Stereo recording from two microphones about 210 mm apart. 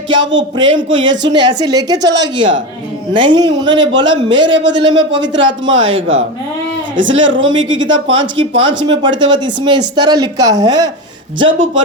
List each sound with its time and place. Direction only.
0.1 s speech: 60° right (ahead or behind)
1.3 s a woman's voice: 20° right (ahead or behind)
2.1 s speech: 60° right (ahead or behind)
3.1 s a woman's voice: 25° right (ahead or behind)
5.6 s speech: 65° right (ahead or behind)
8.9 s a woman's voice: 20° right (ahead or behind)
11.3 s speech: 65° right (ahead or behind)